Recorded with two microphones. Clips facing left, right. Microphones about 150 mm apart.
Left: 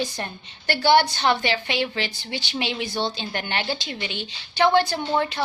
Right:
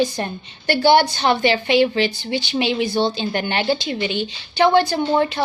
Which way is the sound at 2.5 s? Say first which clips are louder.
Right 7 dB; 10° right (ahead or behind).